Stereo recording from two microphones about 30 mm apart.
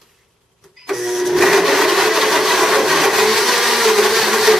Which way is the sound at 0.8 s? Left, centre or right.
Centre.